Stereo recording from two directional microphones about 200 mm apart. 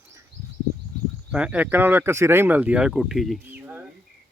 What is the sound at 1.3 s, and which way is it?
Speech, 5° right (ahead or behind).